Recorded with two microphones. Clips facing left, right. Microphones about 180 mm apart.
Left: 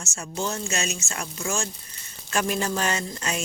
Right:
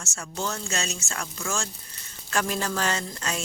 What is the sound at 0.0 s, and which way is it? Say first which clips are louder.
A woman's voice: left 2 dB; 20° left (ahead or behind).